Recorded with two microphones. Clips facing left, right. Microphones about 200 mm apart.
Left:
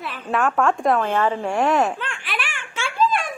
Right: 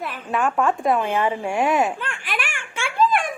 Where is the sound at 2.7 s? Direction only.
55° right (ahead or behind).